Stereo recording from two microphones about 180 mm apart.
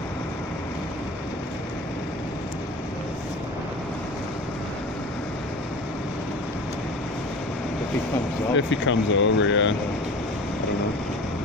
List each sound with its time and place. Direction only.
8.5 s speech: 90° left